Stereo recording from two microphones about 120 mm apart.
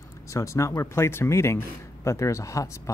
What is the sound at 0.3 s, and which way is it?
Speech, 25° left (ahead or behind).